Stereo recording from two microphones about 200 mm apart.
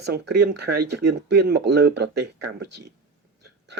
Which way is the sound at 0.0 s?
55° right (ahead or behind).